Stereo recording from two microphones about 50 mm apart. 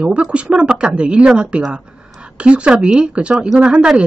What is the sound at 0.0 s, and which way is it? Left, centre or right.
A woman's voice, right.